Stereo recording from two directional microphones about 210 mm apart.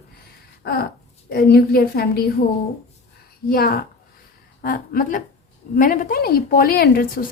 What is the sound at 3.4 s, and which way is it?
A woman's voice, 45° left (ahead or behind).